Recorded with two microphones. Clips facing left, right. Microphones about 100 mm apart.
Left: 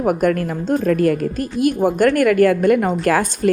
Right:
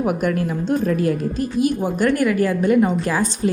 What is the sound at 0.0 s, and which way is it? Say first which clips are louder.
A woman's voice: left 3 dB; 45° left (ahead or behind).